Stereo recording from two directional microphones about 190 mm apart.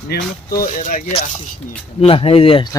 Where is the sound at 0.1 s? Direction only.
50° left (ahead or behind).